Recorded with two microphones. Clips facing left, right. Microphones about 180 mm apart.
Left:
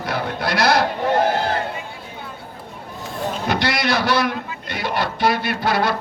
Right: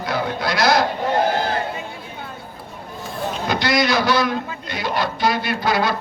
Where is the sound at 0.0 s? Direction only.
60° left (ahead or behind).